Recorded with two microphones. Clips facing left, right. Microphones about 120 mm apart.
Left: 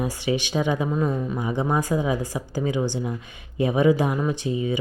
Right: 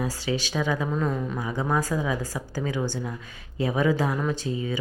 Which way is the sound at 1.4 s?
20° left (ahead or behind).